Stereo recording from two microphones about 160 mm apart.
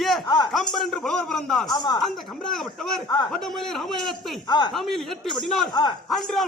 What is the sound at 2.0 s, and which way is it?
A man's voice, centre (ahead or behind).